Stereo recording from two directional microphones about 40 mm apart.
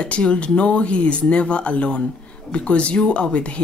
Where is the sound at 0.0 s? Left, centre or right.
Left.